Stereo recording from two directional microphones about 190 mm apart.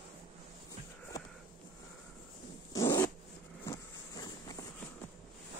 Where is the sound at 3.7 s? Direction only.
20° left (ahead or behind).